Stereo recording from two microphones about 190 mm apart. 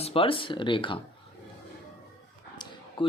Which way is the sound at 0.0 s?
30° left (ahead or behind).